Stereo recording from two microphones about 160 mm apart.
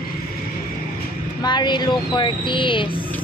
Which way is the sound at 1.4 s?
30° left (ahead or behind).